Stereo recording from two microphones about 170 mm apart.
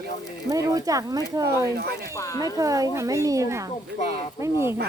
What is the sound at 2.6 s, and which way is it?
Speech, 20° right (ahead or behind).